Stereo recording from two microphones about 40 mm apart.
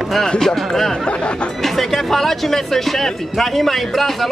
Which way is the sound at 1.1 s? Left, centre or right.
Left.